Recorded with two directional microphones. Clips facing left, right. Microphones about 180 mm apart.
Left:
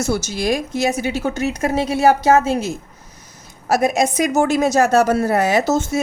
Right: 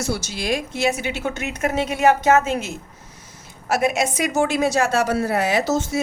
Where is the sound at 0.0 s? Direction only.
45° left (ahead or behind).